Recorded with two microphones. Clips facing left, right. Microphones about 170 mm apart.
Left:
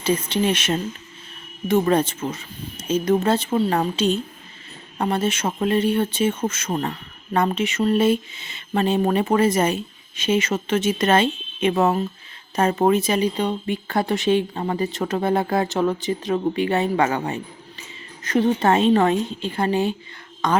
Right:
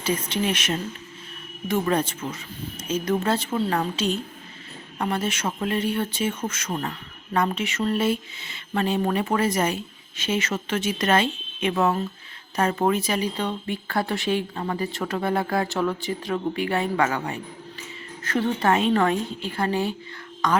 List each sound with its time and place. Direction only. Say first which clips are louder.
0.0 s speech: left 4 dB; 25° left (ahead or behind)